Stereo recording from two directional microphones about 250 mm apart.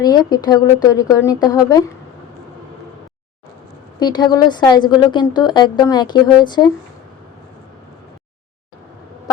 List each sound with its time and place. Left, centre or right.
0.0 s a woman's voice: centre
4.0 s a woman's voice: centre